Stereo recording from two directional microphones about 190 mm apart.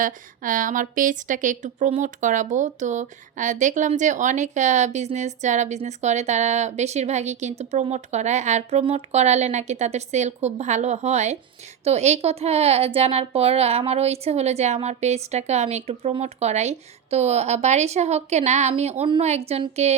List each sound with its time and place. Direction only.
0.0 s a woman's voice: 45° right (ahead or behind)